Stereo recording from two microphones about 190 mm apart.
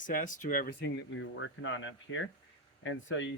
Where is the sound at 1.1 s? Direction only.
80° left.